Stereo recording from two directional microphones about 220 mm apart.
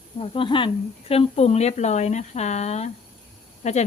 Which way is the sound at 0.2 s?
25° left (ahead or behind).